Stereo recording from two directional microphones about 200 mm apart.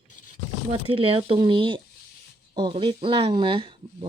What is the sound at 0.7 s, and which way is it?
Speech, 30° right (ahead or behind).